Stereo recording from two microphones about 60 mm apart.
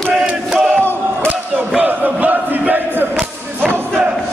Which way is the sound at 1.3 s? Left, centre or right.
Right.